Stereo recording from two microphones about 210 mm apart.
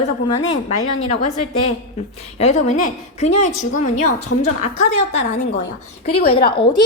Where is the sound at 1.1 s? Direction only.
30° left (ahead or behind).